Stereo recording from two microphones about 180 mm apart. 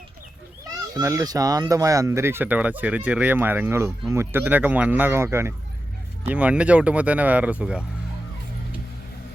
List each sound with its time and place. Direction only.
0.9 s speech: 20° right (ahead or behind)